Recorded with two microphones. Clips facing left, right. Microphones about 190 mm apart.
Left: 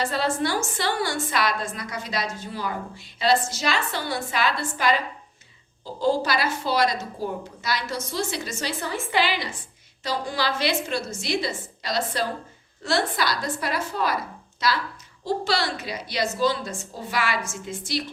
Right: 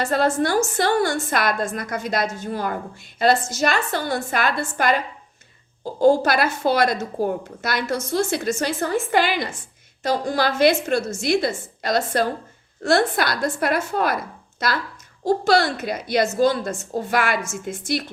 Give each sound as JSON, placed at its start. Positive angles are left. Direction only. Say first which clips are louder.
{"t": 0.0, "sound": "a woman's voice", "louder": "right 5 dB", "side_deg": -50}